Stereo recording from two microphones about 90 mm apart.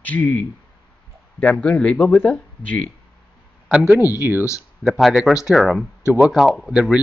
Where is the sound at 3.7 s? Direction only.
10° right (ahead or behind).